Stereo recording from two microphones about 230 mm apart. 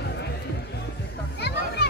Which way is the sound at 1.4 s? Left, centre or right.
Left.